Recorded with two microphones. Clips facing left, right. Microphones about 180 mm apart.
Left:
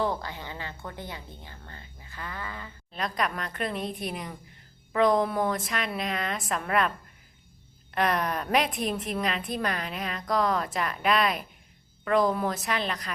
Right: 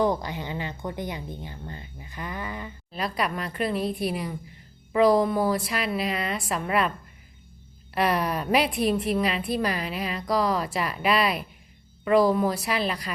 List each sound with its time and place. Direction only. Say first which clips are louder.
0.0 s a woman's voice: right 5 dB; 15° right (ahead or behind)
2.9 s a woman's voice: right 2 dB; 5° right (ahead or behind)
7.9 s a woman's voice: right 2 dB; 5° right (ahead or behind)